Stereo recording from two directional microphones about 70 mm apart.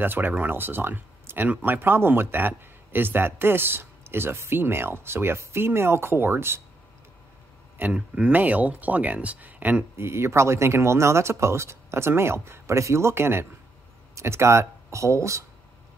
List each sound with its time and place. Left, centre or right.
0.0 s speech: right
7.9 s speech: centre
9.9 s speech: right